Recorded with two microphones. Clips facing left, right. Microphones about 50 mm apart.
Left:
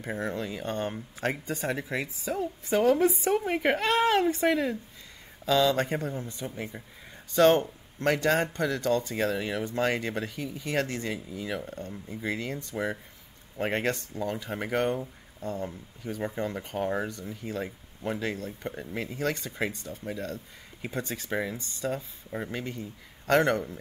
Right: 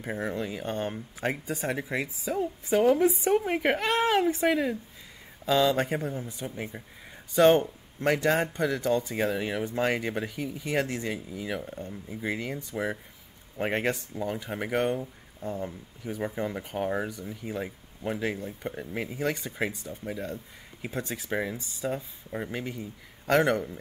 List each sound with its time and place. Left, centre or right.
0.0 s speech: centre
5.4 s speech: centre